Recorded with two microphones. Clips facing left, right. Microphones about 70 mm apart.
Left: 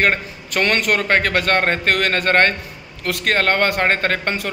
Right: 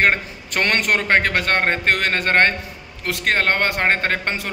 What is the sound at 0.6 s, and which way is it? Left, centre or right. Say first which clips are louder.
A man's voice: left 1 dB; right.